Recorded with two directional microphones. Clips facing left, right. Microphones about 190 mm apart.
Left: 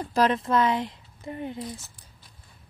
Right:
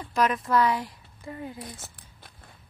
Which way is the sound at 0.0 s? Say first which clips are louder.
Left 3 dB; 30° left (ahead or behind).